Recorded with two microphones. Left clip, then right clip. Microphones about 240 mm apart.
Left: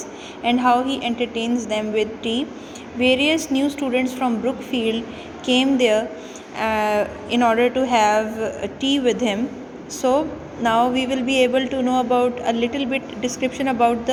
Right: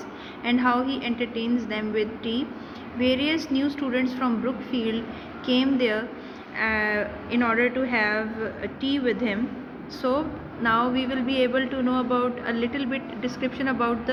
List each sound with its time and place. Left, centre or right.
0.4 s speech: centre
10.2 s speech: left